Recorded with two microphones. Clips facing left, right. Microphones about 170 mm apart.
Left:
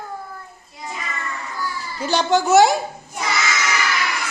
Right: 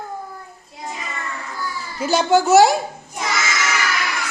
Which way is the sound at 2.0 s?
5° right (ahead or behind).